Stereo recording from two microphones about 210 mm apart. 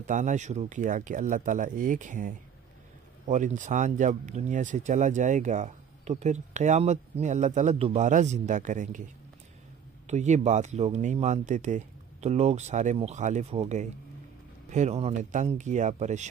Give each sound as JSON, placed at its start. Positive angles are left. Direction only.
{"t": 0.0, "sound": "speech", "side_deg": -35}